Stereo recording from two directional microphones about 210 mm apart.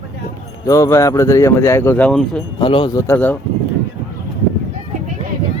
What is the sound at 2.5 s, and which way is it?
Speech, 25° left (ahead or behind).